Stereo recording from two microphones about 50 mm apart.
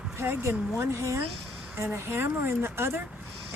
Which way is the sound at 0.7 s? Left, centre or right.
Right.